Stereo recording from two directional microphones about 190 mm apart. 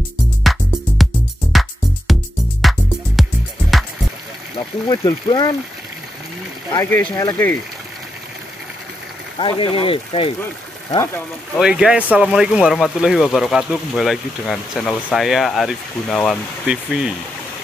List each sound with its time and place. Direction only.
0.4 s music: centre (ahead or behind)
4.6 s speech: 20° left (ahead or behind)
6.7 s speech: 15° left (ahead or behind)
9.4 s speech: 25° left (ahead or behind)
11.1 s speech: centre (ahead or behind)